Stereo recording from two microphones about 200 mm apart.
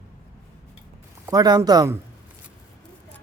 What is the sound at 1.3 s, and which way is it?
Speech, 20° right (ahead or behind).